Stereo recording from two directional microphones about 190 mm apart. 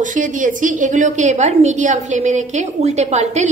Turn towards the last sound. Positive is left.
turn(degrees=-35)  # may be behind; listen again after turning